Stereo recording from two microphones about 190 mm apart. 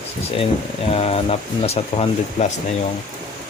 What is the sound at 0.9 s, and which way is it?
Speech, 30° left (ahead or behind).